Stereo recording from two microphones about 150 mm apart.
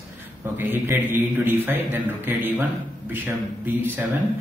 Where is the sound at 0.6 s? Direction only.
15° right (ahead or behind).